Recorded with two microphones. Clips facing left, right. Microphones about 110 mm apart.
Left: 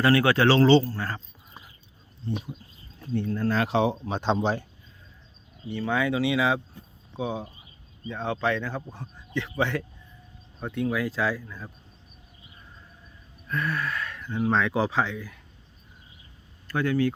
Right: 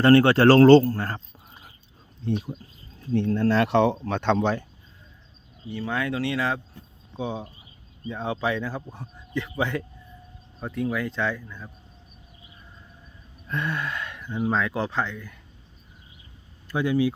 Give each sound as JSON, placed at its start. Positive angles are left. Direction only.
{"t": 0.0, "sound": "speech", "side_deg": -35}
{"t": 3.1, "sound": "speech", "side_deg": -90}
{"t": 5.7, "sound": "a man's voice", "side_deg": 0}
{"t": 13.5, "sound": "speech", "side_deg": -25}
{"t": 16.6, "sound": "speech", "side_deg": -15}